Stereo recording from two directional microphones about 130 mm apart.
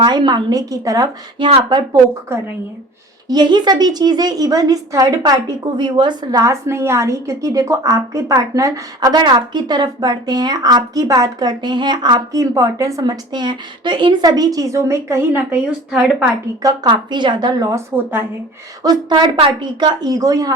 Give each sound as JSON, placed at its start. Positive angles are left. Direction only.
{"t": 0.0, "sound": "speech", "side_deg": -35}
{"t": 1.4, "sound": "speech", "side_deg": -40}
{"t": 2.3, "sound": "a woman's voice", "side_deg": -20}
{"t": 3.2, "sound": "a woman's voice", "side_deg": -35}
{"t": 16.6, "sound": "speech", "side_deg": -35}
{"t": 18.8, "sound": "speech", "side_deg": -35}